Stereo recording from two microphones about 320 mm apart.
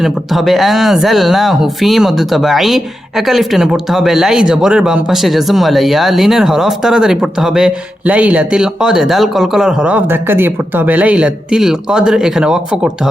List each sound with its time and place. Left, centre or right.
0.0 s speech: centre